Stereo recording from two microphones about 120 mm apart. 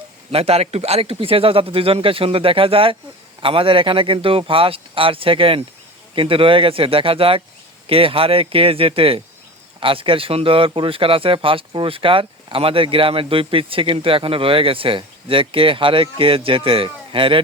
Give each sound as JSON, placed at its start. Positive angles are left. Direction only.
{"t": 0.3, "sound": "speech", "side_deg": -55}